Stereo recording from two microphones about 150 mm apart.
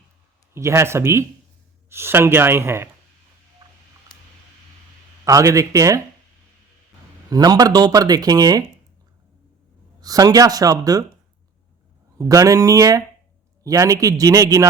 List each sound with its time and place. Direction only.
0.5 s speech: 20° right (ahead or behind)
5.2 s speech: 20° right (ahead or behind)
7.3 s speech: 25° right (ahead or behind)
10.0 s speech: 25° right (ahead or behind)
12.1 s speech: 20° right (ahead or behind)